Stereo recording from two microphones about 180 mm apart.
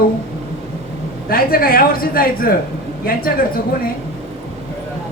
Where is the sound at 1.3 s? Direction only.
55° left (ahead or behind).